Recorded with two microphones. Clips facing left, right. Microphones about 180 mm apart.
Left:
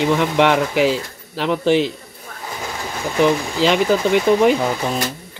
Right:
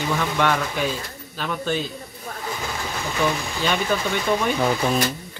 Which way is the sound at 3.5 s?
85° left.